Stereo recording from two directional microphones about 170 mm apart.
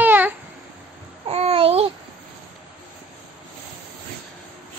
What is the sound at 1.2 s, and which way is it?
Babbling, 40° right (ahead or behind).